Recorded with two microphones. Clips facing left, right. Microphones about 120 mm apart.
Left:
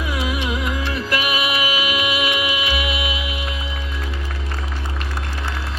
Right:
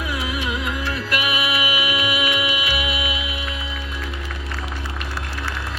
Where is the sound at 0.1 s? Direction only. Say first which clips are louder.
Left 4 dB; 25° left (ahead or behind).